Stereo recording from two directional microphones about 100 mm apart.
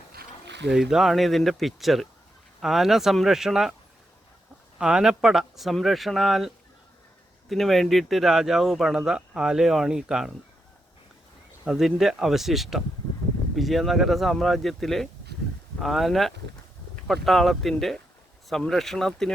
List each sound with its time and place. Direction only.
0.7 s speech: 5° right (ahead or behind)
4.8 s speech: 5° right (ahead or behind)
7.5 s speech: centre (ahead or behind)
11.6 s speech: 5° right (ahead or behind)